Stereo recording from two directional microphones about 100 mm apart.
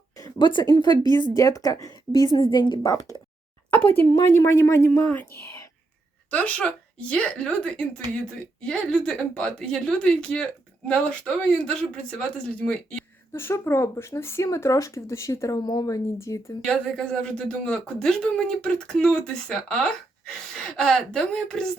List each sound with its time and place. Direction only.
0.3 s a woman's voice: 50° left (ahead or behind)
2.4 s a woman's voice: 50° left (ahead or behind)
2.9 s a woman's voice: 35° left (ahead or behind)
3.7 s speech: 20° left (ahead or behind)
4.0 s a woman's voice: 40° left (ahead or behind)
6.3 s speech: 15° left (ahead or behind)
13.3 s speech: 25° left (ahead or behind); by 16.0 s 40° left (ahead or behind)
16.1 s speech: 30° left (ahead or behind)
16.6 s speech: 10° left (ahead or behind)